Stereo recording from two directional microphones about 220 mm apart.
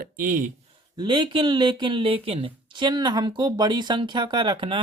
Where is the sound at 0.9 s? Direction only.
20° right (ahead or behind).